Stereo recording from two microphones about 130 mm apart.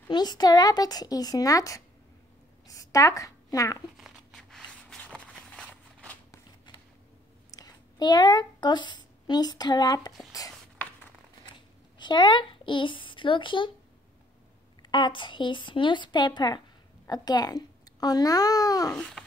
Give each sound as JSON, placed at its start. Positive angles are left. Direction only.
{"t": 0.1, "sound": "a child's voice", "side_deg": 30}
{"t": 3.9, "sound": "a sound", "side_deg": 0}
{"t": 7.5, "sound": "speech", "side_deg": 30}
{"t": 12.0, "sound": "speech", "side_deg": 35}
{"t": 14.8, "sound": "a woman's voice", "side_deg": 35}
{"t": 18.9, "sound": "babbling", "side_deg": 5}